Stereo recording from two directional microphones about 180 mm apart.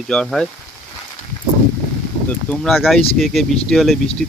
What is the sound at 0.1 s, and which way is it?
Speech, 5° left (ahead or behind).